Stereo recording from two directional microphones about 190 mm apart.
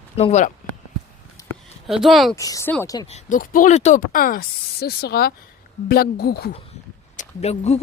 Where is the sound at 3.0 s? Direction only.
40° left (ahead or behind); by 6.5 s 55° left (ahead or behind).